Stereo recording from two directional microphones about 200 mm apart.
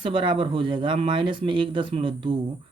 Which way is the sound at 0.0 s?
25° right (ahead or behind).